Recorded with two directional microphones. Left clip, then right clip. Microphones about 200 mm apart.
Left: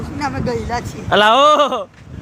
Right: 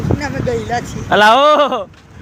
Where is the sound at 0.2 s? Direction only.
10° left (ahead or behind).